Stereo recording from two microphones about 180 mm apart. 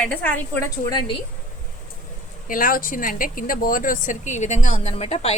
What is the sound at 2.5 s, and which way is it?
A woman's voice, 50° left (ahead or behind).